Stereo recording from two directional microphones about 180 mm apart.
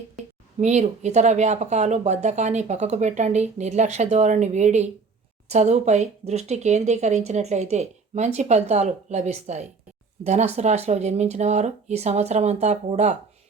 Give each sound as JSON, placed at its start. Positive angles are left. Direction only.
{"t": 0.6, "sound": "speech", "side_deg": -40}